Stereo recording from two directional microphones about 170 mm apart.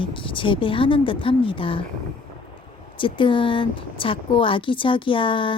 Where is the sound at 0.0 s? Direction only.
30° left (ahead or behind).